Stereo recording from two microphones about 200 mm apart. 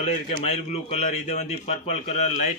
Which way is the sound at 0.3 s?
30° left (ahead or behind).